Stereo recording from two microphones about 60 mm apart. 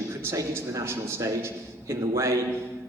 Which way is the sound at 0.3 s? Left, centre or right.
Right.